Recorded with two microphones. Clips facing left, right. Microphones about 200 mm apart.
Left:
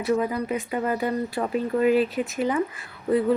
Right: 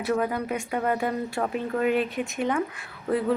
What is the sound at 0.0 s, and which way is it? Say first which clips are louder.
Speech: left 2 dB; centre (ahead or behind).